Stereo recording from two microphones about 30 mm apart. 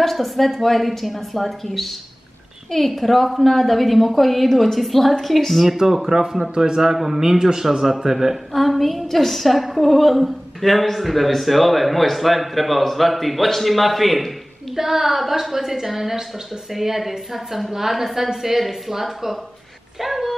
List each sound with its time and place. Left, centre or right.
0.0 s a woman's voice: centre
6.0 s a man's voice: right
8.5 s a woman's voice: centre
14.8 s a woman's voice: centre